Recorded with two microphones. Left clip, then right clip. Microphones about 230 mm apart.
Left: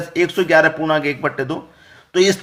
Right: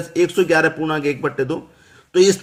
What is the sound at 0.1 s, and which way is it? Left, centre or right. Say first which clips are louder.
A man's voice: left 1 dB; centre.